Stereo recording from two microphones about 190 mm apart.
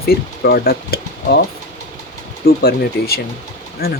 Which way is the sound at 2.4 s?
55° left (ahead or behind).